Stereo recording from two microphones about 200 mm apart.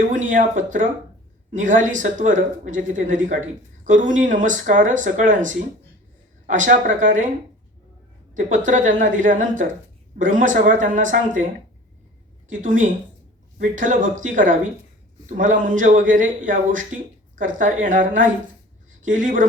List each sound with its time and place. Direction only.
0.1 s a man's voice: 40° right (ahead or behind)
8.4 s a man's voice: 40° right (ahead or behind)
12.5 s a man's voice: 40° right (ahead or behind)